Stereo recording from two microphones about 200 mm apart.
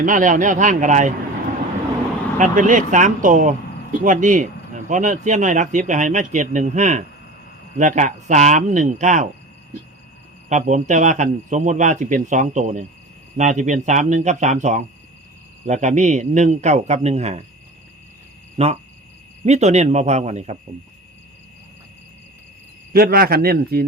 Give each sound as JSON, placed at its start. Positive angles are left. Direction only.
{"t": 0.0, "sound": "speech", "side_deg": -40}
{"t": 2.4, "sound": "speech", "side_deg": -40}
{"t": 10.5, "sound": "speech", "side_deg": -35}
{"t": 18.5, "sound": "speech", "side_deg": -30}
{"t": 22.9, "sound": "speech", "side_deg": -50}